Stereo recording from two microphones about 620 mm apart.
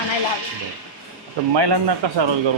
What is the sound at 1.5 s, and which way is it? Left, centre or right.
Speech, right.